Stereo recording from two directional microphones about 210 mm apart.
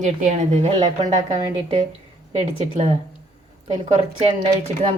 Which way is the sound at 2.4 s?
30° right (ahead or behind).